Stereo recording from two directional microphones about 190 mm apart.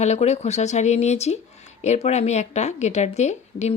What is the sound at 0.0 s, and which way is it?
Speech, 35° left (ahead or behind).